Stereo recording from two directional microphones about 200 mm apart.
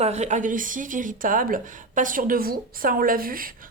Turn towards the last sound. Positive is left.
turn(degrees=-45)  # may be behind; listen again after turning